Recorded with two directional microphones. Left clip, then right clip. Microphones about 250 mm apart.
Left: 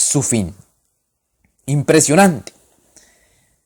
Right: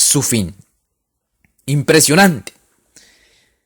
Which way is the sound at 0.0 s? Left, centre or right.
Right.